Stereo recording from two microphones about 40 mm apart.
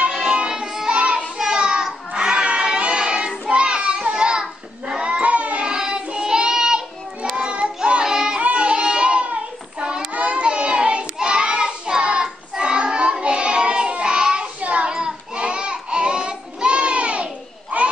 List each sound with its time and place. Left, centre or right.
0.1 s music: centre
0.8 s child singing: right
1.4 s a sound: right
3.4 s children playing: right
5.2 s a sound: right
5.6 s child singing: centre
8.0 s child singing: centre
8.4 s child singing: right